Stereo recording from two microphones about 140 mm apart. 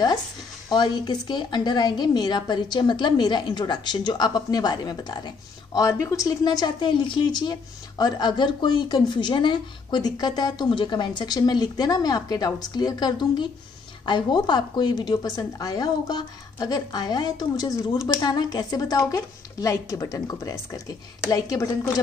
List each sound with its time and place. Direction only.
0.7 s a woman's voice: 30° left (ahead or behind)